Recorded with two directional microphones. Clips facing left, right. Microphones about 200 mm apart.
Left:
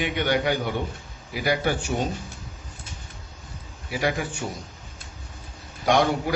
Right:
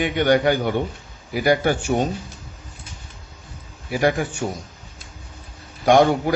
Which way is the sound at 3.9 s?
50° right (ahead or behind).